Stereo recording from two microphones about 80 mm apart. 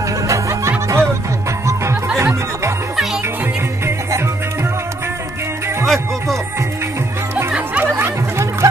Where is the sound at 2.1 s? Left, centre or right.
Right.